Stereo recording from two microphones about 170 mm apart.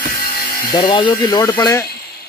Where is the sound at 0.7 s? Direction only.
25° left (ahead or behind).